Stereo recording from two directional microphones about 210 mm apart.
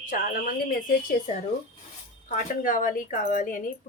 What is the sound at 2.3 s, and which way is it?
A woman's voice, 40° left (ahead or behind).